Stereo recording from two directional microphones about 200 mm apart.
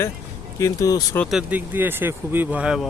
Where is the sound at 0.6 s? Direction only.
15° left (ahead or behind).